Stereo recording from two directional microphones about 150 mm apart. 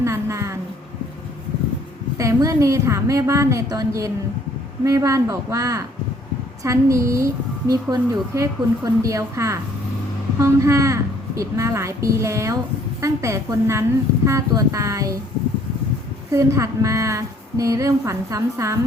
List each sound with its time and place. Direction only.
0.0 s a sound: 20° right (ahead or behind)
2.1 s a woman's voice: 20° right (ahead or behind)
16.3 s a woman's voice: 20° right (ahead or behind)